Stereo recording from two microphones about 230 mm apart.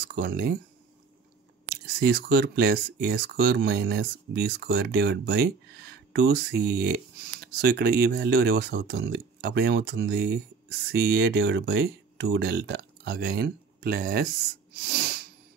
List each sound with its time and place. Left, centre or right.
0.1 s speech: right
2.0 s speech: right
14.7 s sneeze: right